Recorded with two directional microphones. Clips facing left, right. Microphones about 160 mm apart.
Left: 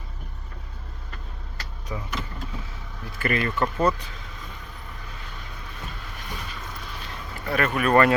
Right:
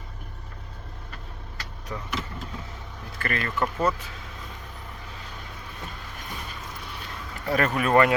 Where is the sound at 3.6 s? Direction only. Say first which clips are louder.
Even; 5° right (ahead or behind).